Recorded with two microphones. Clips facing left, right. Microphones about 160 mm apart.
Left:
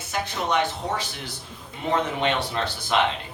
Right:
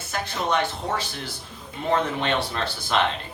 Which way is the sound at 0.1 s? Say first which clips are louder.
Even; 15° left (ahead or behind).